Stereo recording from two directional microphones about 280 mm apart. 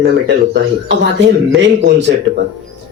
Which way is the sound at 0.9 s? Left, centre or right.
Right.